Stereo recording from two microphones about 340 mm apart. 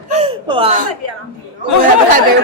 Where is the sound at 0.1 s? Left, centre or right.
Centre.